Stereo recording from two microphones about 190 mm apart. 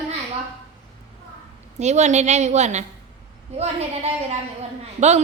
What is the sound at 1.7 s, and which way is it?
A woman's voice, 35° right (ahead or behind).